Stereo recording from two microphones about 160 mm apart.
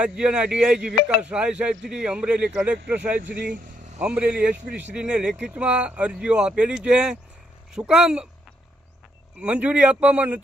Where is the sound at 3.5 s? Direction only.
50° right (ahead or behind).